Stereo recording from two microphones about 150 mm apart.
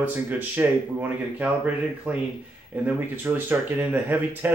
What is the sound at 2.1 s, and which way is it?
Speech, 10° right (ahead or behind).